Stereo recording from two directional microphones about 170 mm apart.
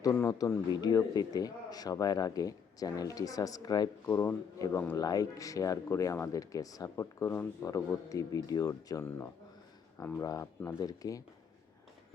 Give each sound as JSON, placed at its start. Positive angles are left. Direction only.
{"t": 0.0, "sound": "a man's voice", "side_deg": 15}